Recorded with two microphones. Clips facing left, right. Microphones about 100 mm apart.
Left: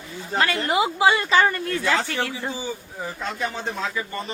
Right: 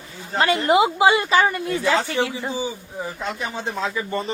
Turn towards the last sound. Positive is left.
turn(degrees=-20)  # may be behind; listen again after turning